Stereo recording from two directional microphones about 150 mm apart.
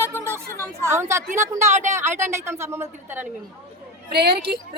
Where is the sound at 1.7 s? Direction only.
55° right (ahead or behind).